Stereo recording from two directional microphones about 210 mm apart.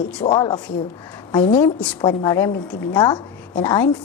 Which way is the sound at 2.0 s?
20° left (ahead or behind).